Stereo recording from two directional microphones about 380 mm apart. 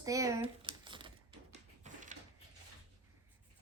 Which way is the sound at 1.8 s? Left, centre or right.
Centre.